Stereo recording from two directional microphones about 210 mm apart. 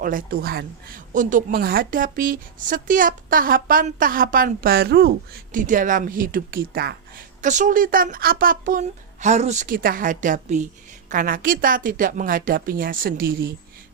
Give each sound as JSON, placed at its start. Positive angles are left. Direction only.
{"t": 0.0, "sound": "speech", "side_deg": -40}